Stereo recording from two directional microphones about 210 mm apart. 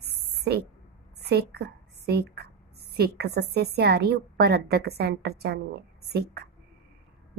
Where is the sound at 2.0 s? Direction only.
50° right (ahead or behind).